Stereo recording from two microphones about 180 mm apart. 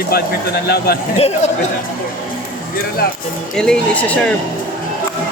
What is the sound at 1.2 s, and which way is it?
Speech, 35° left (ahead or behind).